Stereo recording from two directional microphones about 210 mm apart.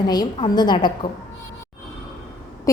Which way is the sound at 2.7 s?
15° left (ahead or behind).